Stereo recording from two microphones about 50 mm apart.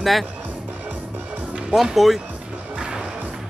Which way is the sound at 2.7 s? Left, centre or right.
Centre.